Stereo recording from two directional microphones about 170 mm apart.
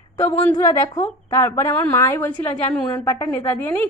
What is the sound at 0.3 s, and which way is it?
A woman's voice, 20° left (ahead or behind).